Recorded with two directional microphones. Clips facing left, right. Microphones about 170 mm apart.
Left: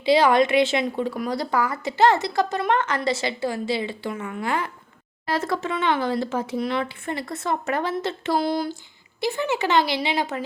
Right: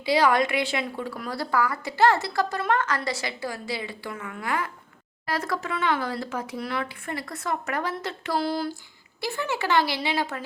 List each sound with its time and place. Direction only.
0.0 s a woman's voice: 25° left (ahead or behind)